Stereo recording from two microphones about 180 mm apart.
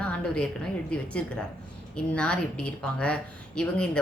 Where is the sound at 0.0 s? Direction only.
5° left (ahead or behind).